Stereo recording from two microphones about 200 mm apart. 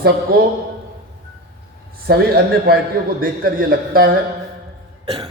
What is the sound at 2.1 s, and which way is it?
A man's voice, 50° right (ahead or behind).